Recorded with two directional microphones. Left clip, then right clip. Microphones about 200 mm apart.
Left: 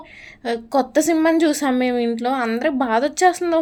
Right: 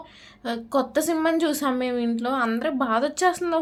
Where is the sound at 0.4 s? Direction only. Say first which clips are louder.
Left 5 dB; 25° left (ahead or behind).